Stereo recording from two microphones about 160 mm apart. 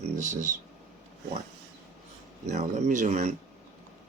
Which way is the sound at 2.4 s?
45° right (ahead or behind).